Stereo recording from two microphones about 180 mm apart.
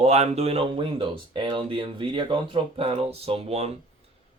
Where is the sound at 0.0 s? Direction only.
35° right (ahead or behind).